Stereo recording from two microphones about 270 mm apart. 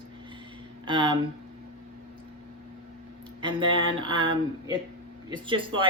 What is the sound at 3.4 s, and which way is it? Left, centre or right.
Speech, centre.